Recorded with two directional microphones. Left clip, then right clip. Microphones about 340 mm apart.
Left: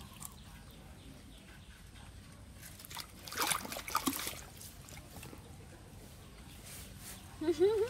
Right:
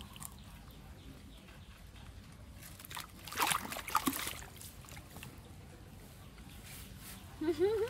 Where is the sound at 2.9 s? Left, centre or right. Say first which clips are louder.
Right 1 dB; centre.